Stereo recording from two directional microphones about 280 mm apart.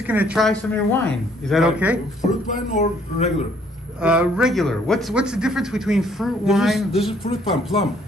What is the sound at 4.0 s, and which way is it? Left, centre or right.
A man's voice, centre.